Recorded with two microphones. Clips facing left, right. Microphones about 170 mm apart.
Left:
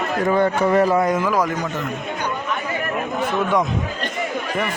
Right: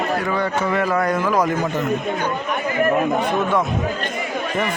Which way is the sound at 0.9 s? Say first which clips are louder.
Left 2 dB; 20° left (ahead or behind).